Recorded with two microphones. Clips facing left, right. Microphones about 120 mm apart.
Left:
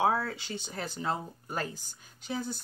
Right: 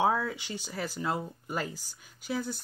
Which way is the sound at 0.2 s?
15° right (ahead or behind).